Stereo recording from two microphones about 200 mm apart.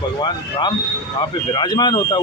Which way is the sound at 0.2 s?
20° left (ahead or behind).